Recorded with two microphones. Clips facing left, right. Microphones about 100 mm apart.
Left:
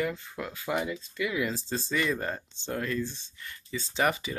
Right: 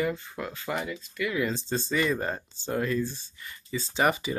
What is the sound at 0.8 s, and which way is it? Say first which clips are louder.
Speech: even; 20° left (ahead or behind).